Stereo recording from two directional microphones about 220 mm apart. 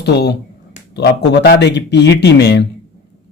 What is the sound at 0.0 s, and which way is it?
Speech, 50° left (ahead or behind).